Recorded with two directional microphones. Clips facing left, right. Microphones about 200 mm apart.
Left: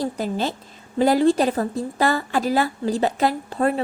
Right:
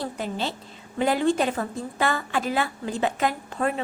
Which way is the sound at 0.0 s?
40° left (ahead or behind).